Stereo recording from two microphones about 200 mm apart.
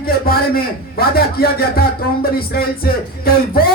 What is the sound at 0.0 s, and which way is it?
A man's voice, 50° left (ahead or behind).